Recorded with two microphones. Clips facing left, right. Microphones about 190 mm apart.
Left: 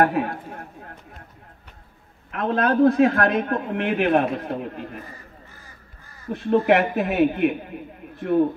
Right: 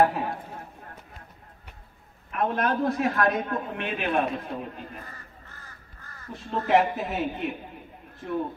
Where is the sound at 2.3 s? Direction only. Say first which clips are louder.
Left 5 dB; 90° left; by 4.8 s 70° left (ahead or behind).